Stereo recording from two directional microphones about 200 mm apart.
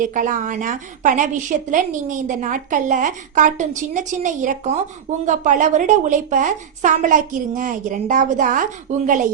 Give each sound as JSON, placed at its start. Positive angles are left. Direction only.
{"t": 0.0, "sound": "a woman's voice", "side_deg": -40}